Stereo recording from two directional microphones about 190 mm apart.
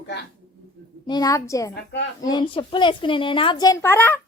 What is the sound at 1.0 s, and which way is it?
Speech, 20° left (ahead or behind).